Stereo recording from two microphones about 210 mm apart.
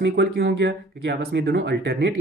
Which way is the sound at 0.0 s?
55° right (ahead or behind).